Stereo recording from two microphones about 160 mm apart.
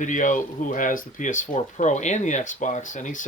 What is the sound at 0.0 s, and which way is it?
Speech, 50° left (ahead or behind).